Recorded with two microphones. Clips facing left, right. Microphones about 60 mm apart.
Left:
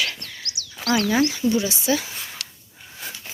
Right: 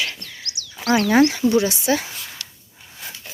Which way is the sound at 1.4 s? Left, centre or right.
Right.